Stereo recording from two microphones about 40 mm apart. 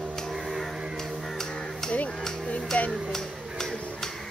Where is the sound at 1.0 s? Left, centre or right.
Centre.